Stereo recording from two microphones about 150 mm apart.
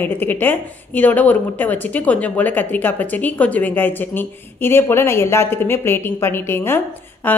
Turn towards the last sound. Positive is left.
turn(degrees=15)  # may be behind; listen again after turning